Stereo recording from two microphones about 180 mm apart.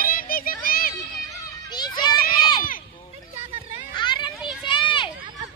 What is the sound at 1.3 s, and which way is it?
Children playing, 25° left (ahead or behind).